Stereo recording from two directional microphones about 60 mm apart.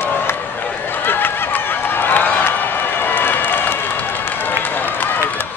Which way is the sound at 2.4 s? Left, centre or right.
Left.